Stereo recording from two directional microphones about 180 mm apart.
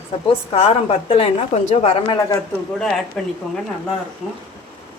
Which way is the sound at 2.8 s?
Centre (ahead or behind).